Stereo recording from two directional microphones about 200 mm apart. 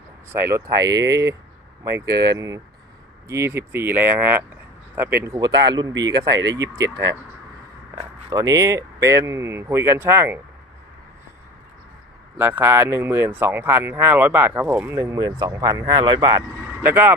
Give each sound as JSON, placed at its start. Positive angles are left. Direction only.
{"t": 0.3, "sound": "speech", "side_deg": -15}
{"t": 7.9, "sound": "speech", "side_deg": -15}
{"t": 12.4, "sound": "speech", "side_deg": -10}